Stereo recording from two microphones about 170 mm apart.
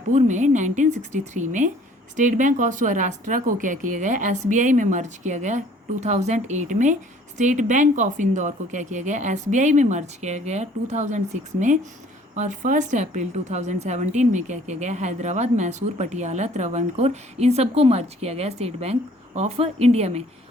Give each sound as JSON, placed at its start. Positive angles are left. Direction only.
{"t": 0.1, "sound": "a woman's voice", "side_deg": -45}
{"t": 12.4, "sound": "a woman's voice", "side_deg": -50}